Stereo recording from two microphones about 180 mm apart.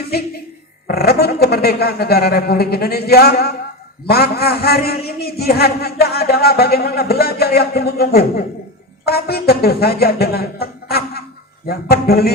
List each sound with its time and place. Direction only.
0.9 s a man's voice: 60° left (ahead or behind)